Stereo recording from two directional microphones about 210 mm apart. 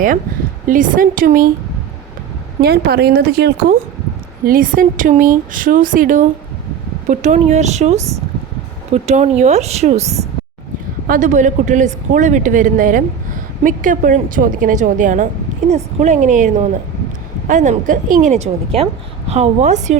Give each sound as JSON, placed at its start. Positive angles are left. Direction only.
{"t": 0.7, "sound": "speech", "side_deg": -40}
{"t": 2.6, "sound": "speech", "side_deg": -45}
{"t": 11.1, "sound": "speech", "side_deg": -35}